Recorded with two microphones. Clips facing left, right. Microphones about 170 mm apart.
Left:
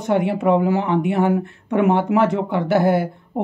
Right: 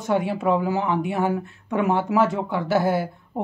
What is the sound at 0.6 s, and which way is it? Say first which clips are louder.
Speech: left 4 dB; 60° left (ahead or behind).